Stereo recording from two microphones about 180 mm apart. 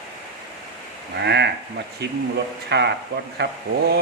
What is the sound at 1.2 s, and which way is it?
Speech, 70° right (ahead or behind).